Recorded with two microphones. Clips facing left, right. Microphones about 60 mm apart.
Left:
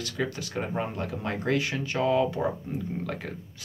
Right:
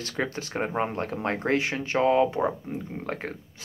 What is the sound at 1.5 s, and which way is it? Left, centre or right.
Speech, right.